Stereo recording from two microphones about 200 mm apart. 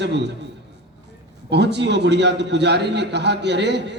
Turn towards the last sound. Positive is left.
turn(degrees=-60)  # may be behind; listen again after turning